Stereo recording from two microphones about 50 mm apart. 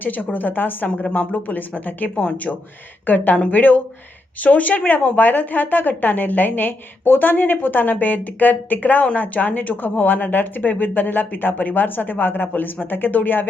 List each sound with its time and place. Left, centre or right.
0.0 s a woman's voice: left
0.9 s a woman's voice: left